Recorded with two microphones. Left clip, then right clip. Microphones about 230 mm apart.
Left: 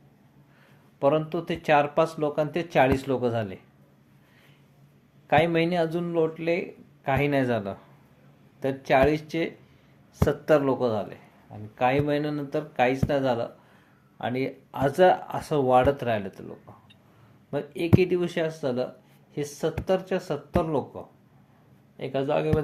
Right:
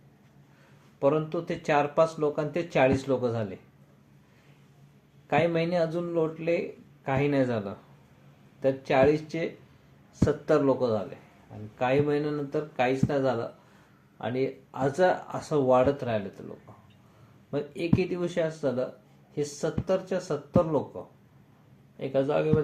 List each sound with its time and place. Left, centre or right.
0.9 s speech: left
5.3 s speech: left
8.9 s speech: left
17.5 s speech: left